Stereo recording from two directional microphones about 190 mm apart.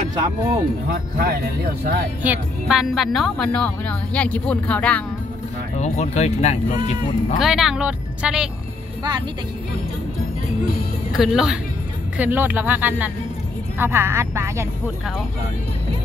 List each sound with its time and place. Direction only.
0.8 s speech: 55° right (ahead or behind)
2.2 s a woman's voice: 5° right (ahead or behind)
5.8 s speech: 35° left (ahead or behind)
7.3 s speech: centre (ahead or behind)
11.1 s a woman's voice: 5° right (ahead or behind)